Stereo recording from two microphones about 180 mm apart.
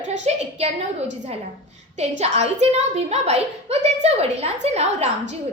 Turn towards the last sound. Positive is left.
turn(degrees=-35)  # may be behind; listen again after turning